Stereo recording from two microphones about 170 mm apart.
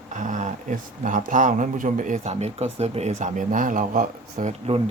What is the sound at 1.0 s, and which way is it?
A man's voice, 50° right (ahead or behind).